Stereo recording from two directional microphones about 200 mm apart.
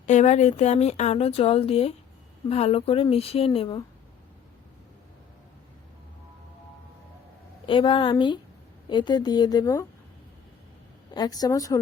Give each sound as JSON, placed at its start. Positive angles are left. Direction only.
{"t": 0.0, "sound": "speech", "side_deg": 35}
{"t": 7.7, "sound": "speech", "side_deg": 25}
{"t": 11.1, "sound": "speech", "side_deg": 20}